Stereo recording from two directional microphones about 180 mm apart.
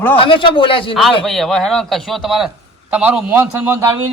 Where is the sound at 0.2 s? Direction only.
30° left (ahead or behind).